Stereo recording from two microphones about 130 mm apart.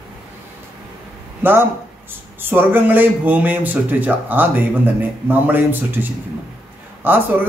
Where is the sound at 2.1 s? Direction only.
15° right (ahead or behind).